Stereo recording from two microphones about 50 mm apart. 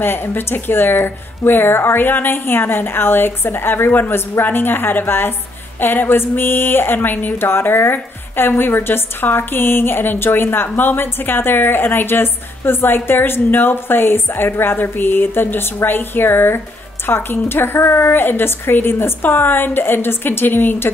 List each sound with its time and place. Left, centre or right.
0.0 s speech: left